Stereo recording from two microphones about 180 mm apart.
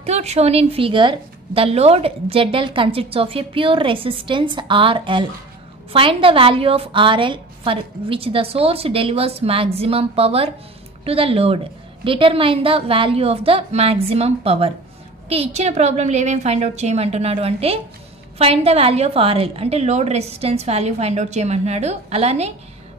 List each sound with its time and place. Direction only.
0.0 s a woman's voice: 35° right (ahead or behind)